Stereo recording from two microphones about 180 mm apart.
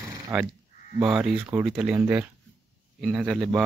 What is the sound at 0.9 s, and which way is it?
A man's voice, 5° right (ahead or behind).